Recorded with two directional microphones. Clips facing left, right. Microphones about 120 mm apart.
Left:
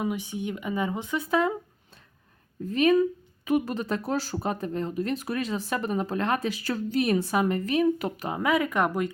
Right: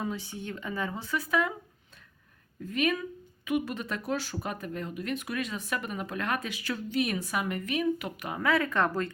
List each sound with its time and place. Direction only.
0.0 s speech: 15° left (ahead or behind)
2.6 s speech: 30° left (ahead or behind)
8.4 s speech: 15° left (ahead or behind)